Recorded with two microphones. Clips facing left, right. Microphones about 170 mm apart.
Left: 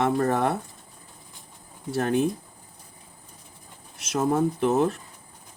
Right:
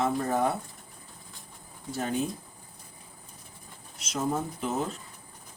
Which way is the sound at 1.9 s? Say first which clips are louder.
Left 7 dB; 65° left (ahead or behind).